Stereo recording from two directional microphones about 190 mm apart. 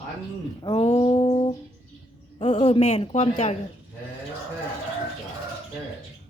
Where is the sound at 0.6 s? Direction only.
30° left (ahead or behind).